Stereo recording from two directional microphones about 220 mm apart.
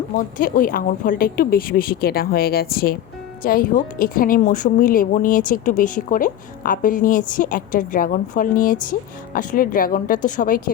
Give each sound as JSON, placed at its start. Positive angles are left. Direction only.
{"t": 0.2, "sound": "a woman's voice", "side_deg": 40}